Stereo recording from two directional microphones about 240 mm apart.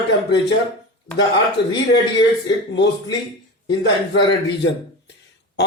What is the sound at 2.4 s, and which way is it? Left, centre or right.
A man's voice, left.